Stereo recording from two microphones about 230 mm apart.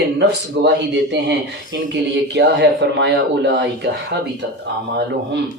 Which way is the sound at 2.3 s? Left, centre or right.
Right.